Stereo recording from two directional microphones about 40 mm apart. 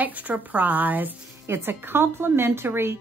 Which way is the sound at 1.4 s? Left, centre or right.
Right.